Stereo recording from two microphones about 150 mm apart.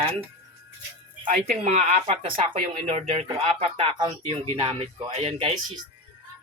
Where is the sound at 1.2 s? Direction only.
45° right (ahead or behind).